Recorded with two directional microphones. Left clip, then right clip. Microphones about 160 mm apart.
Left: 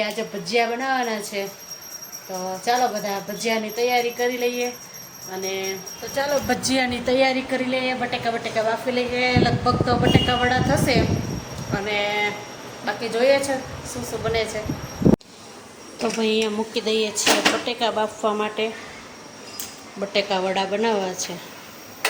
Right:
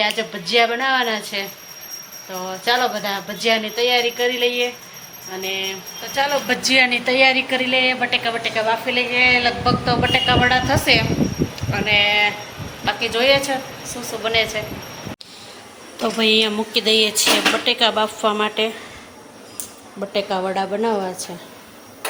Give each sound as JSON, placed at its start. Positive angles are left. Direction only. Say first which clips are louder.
{"t": 0.0, "sound": "jingle bell", "louder": "right 5 dB", "side_deg": 5}
{"t": 2.6, "sound": "jingle bell", "louder": "right 3 dB", "side_deg": 5}
{"t": 5.5, "sound": "speech", "louder": "right 4 dB", "side_deg": 15}
{"t": 6.1, "sound": "speech", "louder": "right 3 dB", "side_deg": 25}
{"t": 16.0, "sound": "jingle bell", "louder": "right 5 dB", "side_deg": 0}
{"t": 20.0, "sound": "jingle bell", "louder": "right 1 dB", "side_deg": -5}